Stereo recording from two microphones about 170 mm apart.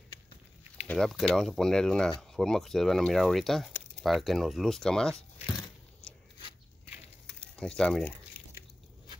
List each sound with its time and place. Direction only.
0.8 s speech: 5° left (ahead or behind)
7.2 s crumpling: 5° left (ahead or behind)